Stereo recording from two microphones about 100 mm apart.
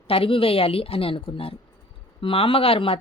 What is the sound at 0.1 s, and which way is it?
Speech, 65° left (ahead or behind).